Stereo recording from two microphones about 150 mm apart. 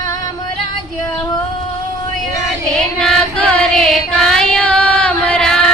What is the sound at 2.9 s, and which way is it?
Female singing, 5° left (ahead or behind).